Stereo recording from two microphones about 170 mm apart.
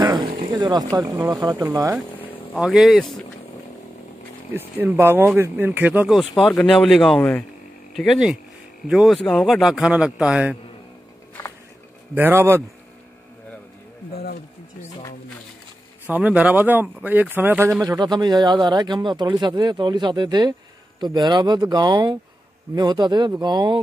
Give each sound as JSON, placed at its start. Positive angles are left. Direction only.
{"t": 0.0, "sound": "a sound", "side_deg": -25}
{"t": 0.5, "sound": "speech", "side_deg": -25}
{"t": 2.6, "sound": "speech", "side_deg": 0}
{"t": 4.6, "sound": "speech", "side_deg": -10}
{"t": 6.4, "sound": "speech", "side_deg": 5}
{"t": 12.2, "sound": "speech", "side_deg": -15}
{"t": 16.1, "sound": "speech", "side_deg": -10}
{"t": 17.8, "sound": "speech", "side_deg": -25}